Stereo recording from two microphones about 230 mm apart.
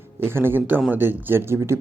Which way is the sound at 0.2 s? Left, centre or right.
Centre.